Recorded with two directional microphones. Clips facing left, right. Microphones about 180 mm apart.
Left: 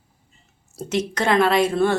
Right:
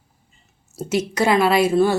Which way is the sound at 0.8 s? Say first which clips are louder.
Right 3 dB; 10° right (ahead or behind).